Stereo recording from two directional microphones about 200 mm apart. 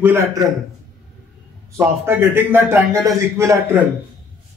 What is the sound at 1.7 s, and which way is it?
A man's voice, 15° right (ahead or behind).